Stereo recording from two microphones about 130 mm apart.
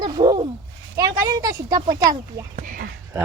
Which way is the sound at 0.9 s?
30° right (ahead or behind).